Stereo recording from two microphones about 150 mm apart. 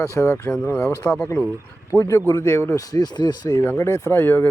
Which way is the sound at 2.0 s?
20° left (ahead or behind).